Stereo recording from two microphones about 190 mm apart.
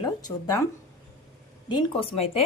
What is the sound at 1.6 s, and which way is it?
Speech, 25° left (ahead or behind).